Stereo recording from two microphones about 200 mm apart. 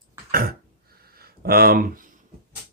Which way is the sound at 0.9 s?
50° right (ahead or behind).